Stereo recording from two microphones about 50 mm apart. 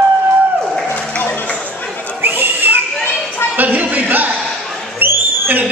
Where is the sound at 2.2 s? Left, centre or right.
Right.